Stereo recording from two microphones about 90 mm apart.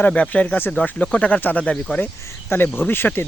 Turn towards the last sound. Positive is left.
turn(degrees=25)  # may be behind; listen again after turning